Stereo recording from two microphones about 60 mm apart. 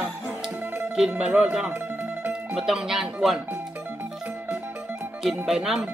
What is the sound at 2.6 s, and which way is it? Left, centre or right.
Speech, centre.